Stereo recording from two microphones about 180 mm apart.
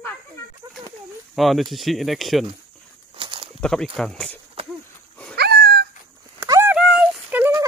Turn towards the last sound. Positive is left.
turn(degrees=-5)  # may be behind; listen again after turning